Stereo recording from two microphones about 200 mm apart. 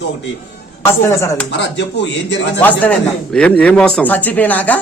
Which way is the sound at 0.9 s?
15° left (ahead or behind).